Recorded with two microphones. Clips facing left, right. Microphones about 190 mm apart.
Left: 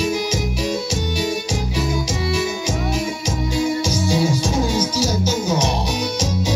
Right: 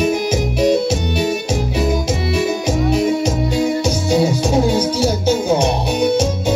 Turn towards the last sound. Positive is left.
turn(degrees=-55)  # may be behind; listen again after turning